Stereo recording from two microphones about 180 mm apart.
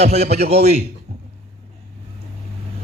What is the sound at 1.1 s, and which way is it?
Finger snapping, 55° right (ahead or behind).